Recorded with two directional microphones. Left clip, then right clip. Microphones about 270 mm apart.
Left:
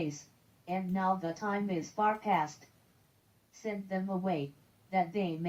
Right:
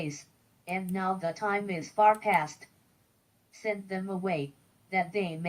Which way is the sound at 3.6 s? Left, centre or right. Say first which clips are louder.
Right 4 dB; right.